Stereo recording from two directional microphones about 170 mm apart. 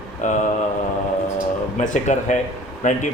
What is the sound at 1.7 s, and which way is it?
A man's voice, 45° left (ahead or behind).